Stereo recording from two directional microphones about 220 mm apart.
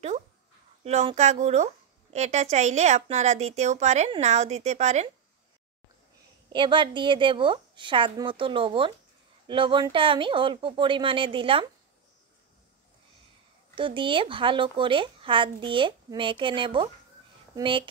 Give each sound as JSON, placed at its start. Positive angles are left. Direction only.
{"t": 0.8, "sound": "a woman's voice", "side_deg": -30}
{"t": 6.5, "sound": "speech", "side_deg": -20}
{"t": 13.7, "sound": "speech", "side_deg": -25}